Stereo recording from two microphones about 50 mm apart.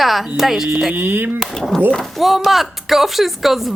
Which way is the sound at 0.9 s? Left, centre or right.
Right.